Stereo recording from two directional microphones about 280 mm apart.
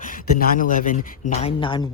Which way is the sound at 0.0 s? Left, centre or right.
Left.